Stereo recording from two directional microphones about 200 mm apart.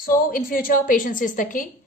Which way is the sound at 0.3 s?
45° left (ahead or behind).